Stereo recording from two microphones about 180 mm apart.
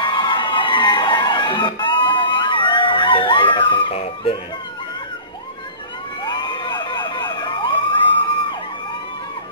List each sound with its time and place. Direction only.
0.0 s music: 25° left (ahead or behind)
6.2 s emergency vehicle: 25° left (ahead or behind)